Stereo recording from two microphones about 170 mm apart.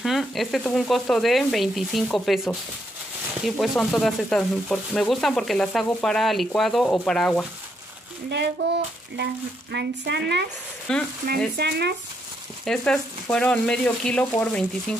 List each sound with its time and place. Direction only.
0.0 s speech: centre (ahead or behind)
8.6 s speech: 80° right
10.9 s speech: 5° left (ahead or behind)
11.2 s speech: 70° right (ahead or behind)
12.6 s speech: 5° left (ahead or behind)